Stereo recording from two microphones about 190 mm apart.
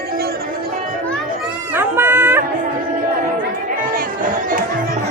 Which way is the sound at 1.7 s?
10° right (ahead or behind).